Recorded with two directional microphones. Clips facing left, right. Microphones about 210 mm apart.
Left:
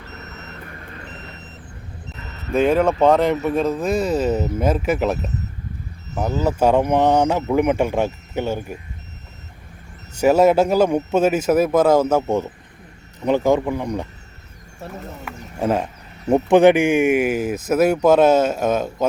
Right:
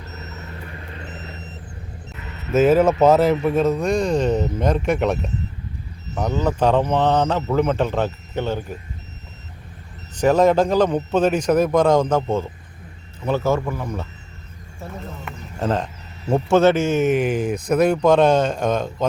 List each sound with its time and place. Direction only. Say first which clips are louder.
2.5 s speech: right 2 dB; 5° right (ahead or behind)
10.2 s speech: left 1 dB; 10° left (ahead or behind)
15.2 s speech: left 3 dB; 10° left (ahead or behind)